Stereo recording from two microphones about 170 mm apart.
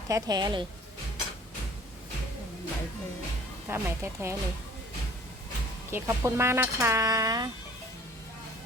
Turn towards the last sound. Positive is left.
turn(degrees=-20)  # may be behind; listen again after turning